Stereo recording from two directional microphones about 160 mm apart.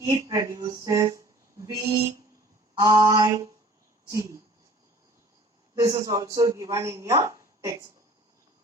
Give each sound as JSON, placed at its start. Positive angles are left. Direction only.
{"t": 0.0, "sound": "speech", "side_deg": -20}
{"t": 5.7, "sound": "speech", "side_deg": -20}